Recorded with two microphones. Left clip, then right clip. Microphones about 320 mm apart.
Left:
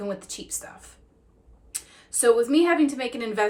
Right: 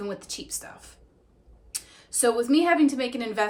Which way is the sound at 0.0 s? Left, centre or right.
Centre.